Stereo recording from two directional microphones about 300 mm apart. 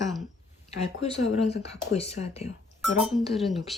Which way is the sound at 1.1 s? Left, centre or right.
Left.